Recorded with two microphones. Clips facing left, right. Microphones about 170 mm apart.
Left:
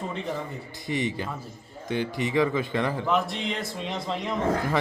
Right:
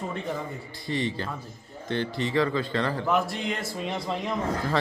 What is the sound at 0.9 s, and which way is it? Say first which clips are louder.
Speech: left 1 dB; 15° left (ahead or behind).